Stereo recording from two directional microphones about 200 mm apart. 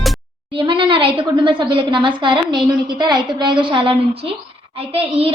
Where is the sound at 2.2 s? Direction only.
25° right (ahead or behind).